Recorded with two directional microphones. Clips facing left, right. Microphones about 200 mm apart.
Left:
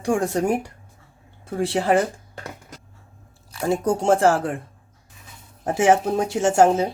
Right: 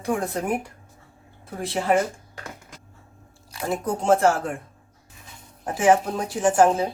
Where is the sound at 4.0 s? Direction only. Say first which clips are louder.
Even; 30° left (ahead or behind).